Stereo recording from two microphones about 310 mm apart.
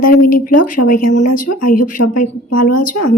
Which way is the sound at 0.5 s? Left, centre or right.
Left.